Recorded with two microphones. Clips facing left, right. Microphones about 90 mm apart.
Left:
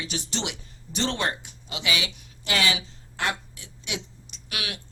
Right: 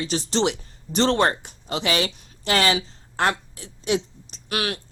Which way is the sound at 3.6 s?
35° right (ahead or behind).